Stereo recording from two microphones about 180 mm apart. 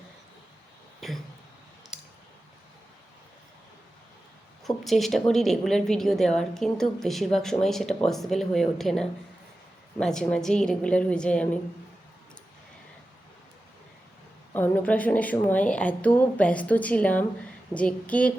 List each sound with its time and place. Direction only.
1.0 s a woman's voice: centre (ahead or behind)
4.6 s a woman's voice: centre (ahead or behind)
14.5 s a woman's voice: 10° left (ahead or behind)